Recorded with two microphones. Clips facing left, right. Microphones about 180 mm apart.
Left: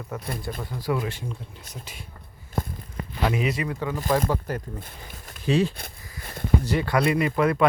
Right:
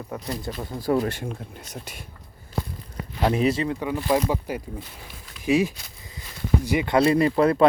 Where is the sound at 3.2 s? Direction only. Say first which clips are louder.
Right 4 dB; 30° right (ahead or behind).